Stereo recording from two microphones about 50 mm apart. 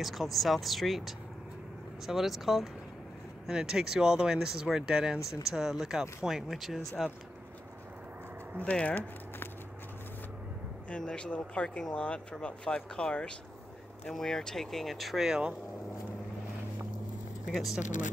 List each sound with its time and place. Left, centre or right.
0.0 s speech: centre
10.9 s speech: centre
17.6 s speech: centre